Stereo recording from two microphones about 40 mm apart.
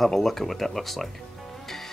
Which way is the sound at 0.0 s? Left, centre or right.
Centre.